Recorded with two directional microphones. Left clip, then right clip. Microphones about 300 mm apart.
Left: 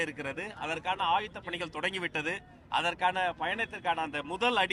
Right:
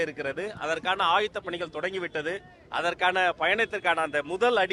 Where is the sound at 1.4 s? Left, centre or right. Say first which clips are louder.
Right 3 dB; centre.